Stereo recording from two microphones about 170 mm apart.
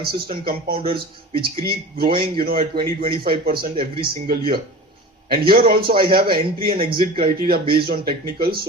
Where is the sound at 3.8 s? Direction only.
60° right (ahead or behind).